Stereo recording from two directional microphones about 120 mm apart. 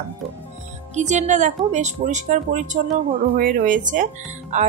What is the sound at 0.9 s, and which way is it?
A woman's voice, 75° right (ahead or behind).